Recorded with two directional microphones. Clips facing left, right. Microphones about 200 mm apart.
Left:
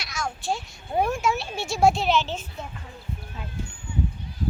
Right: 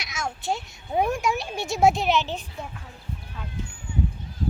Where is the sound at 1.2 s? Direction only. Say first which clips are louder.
Even; 15° right (ahead or behind).